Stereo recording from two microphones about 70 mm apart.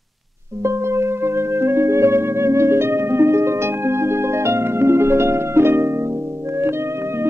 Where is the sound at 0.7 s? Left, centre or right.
Right.